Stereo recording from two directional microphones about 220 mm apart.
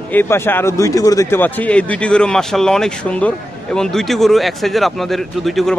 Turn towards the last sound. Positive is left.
turn(degrees=0)  # may be behind; listen again after turning